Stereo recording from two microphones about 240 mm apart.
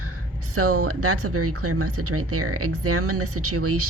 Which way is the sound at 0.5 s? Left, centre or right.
Right.